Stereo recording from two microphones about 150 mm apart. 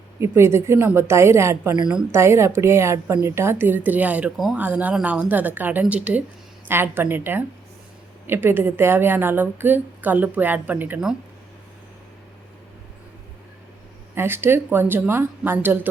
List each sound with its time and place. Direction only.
0.2 s a woman's voice: 15° right (ahead or behind)
14.2 s a woman's voice: 15° right (ahead or behind)